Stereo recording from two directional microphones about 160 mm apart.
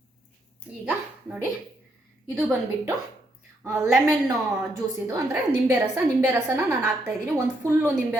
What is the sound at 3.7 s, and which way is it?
Speech, 15° right (ahead or behind).